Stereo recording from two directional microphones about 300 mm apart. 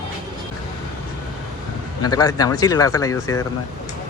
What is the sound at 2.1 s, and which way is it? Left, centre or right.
Speech, centre.